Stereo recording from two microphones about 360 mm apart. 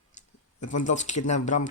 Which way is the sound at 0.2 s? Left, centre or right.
Centre.